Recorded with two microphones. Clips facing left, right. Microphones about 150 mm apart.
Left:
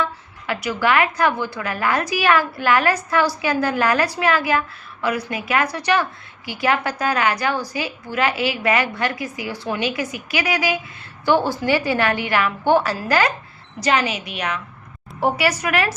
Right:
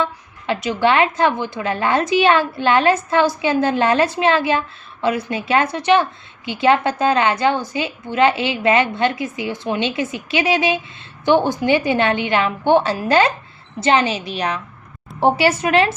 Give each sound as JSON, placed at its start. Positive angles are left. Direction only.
{"t": 0.0, "sound": "a woman's voice", "side_deg": -25}